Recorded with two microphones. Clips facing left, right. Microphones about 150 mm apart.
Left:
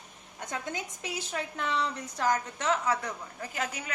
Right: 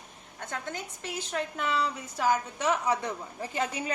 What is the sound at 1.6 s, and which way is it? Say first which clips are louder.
A woman's voice: even; 5° right (ahead or behind).